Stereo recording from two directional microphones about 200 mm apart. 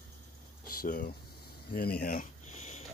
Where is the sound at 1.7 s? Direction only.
50° left (ahead or behind); by 2.8 s 35° left (ahead or behind).